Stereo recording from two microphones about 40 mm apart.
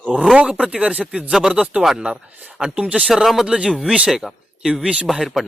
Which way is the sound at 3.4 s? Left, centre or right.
Right.